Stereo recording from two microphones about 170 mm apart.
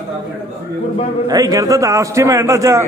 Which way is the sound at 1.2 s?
20° right (ahead or behind).